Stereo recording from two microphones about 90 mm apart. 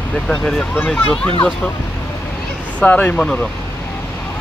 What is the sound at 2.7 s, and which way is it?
Speech, 15° left (ahead or behind).